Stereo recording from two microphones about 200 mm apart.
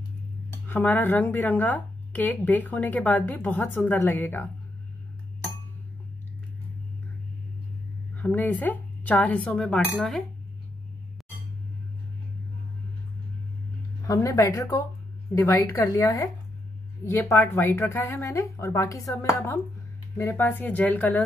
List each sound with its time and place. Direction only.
0.5 s speech: 10° left (ahead or behind)
8.2 s speech: 10° left (ahead or behind)
14.0 s speech: 15° left (ahead or behind)